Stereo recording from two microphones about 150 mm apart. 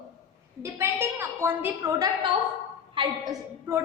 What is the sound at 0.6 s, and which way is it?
A woman's voice, 15° right (ahead or behind).